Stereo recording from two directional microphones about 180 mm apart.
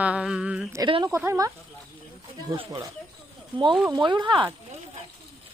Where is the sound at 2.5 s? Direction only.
25° right (ahead or behind).